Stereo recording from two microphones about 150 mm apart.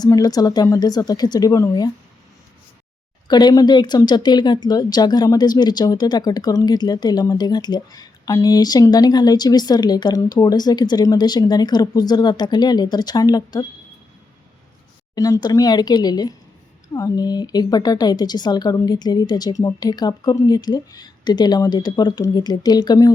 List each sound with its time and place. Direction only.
0.0 s a woman's voice: 25° left (ahead or behind)
3.2 s a woman's voice: 30° left (ahead or behind)
15.1 s a woman's voice: 25° left (ahead or behind)